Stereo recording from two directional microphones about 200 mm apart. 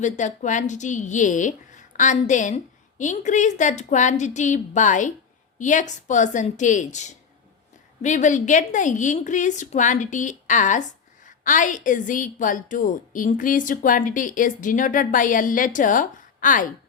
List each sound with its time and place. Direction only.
0.0 s a woman's voice: 40° left (ahead or behind)